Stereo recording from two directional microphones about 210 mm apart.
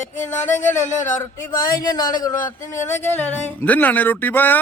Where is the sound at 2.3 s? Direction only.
40° left (ahead or behind).